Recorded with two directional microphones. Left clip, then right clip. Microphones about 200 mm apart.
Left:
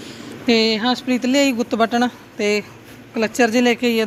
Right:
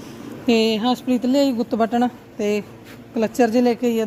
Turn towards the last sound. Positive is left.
turn(degrees=-10)  # may be behind; listen again after turning